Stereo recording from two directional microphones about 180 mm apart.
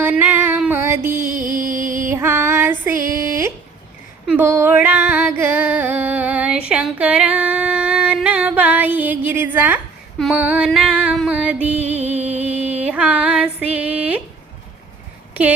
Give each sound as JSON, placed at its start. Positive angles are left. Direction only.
{"t": 0.0, "sound": "music", "side_deg": -10}
{"t": 1.1, "sound": "music", "side_deg": -50}
{"t": 2.0, "sound": "female singing", "side_deg": -15}
{"t": 4.3, "sound": "music", "side_deg": -15}
{"t": 11.8, "sound": "music", "side_deg": -35}
{"t": 12.9, "sound": "female singing", "side_deg": -5}